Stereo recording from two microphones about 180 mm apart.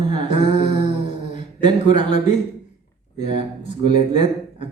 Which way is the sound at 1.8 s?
40° left (ahead or behind).